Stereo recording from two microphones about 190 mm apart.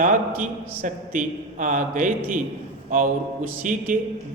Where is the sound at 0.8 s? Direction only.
45° right (ahead or behind).